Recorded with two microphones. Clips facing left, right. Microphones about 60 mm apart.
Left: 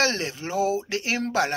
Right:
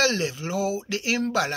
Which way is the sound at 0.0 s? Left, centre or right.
Left.